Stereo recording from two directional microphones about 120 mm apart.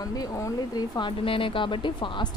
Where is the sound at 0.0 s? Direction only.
30° left (ahead or behind).